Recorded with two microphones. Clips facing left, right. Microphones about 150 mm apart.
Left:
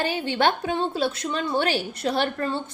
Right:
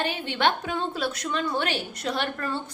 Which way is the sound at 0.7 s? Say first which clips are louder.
Left 4 dB; 25° left (ahead or behind).